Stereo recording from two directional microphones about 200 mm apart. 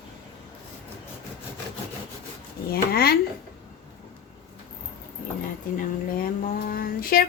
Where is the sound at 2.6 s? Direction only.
50° left (ahead or behind).